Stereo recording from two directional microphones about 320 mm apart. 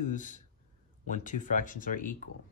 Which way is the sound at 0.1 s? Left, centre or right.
Left.